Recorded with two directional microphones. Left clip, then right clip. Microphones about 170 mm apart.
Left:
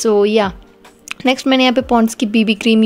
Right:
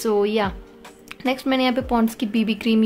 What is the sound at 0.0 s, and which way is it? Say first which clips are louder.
A woman's voice: left 7 dB; 35° left (ahead or behind).